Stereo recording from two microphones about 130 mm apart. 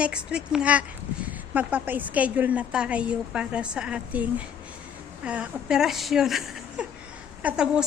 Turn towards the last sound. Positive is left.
turn(degrees=-5)  # may be behind; listen again after turning